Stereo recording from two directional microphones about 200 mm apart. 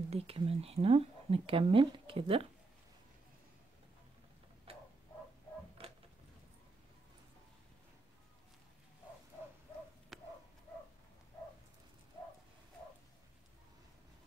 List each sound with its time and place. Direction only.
0.1 s speech: 30° right (ahead or behind)
4.7 s tick-tock: 30° right (ahead or behind)
10.1 s a sound: centre (ahead or behind)